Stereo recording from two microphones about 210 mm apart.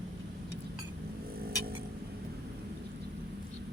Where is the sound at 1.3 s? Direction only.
45° right (ahead or behind).